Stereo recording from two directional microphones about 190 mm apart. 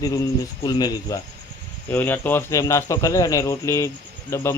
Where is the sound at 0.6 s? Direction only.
20° left (ahead or behind).